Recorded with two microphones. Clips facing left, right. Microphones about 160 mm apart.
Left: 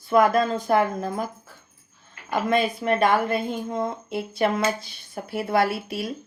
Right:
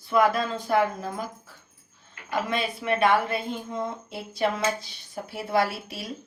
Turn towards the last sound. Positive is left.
turn(degrees=55)  # may be behind; listen again after turning